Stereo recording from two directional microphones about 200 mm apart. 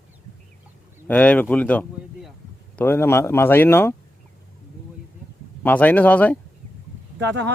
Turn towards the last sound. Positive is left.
turn(degrees=-60)  # may be behind; listen again after turning